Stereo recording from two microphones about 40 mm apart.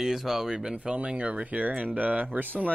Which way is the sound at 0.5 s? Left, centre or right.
Right.